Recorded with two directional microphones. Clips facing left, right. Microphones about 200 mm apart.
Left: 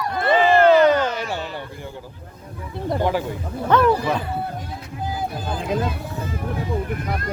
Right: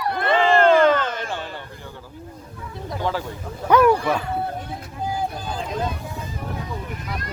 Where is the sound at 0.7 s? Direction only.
50° right (ahead or behind).